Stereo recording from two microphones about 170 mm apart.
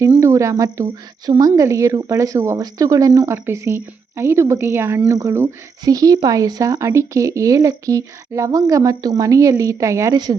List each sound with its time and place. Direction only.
0.1 s speech: 15° right (ahead or behind)